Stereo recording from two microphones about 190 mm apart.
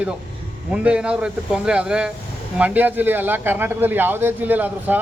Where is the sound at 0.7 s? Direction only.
5° right (ahead or behind).